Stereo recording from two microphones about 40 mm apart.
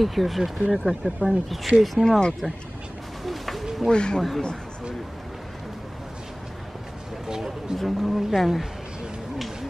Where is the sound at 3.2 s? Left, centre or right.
Centre.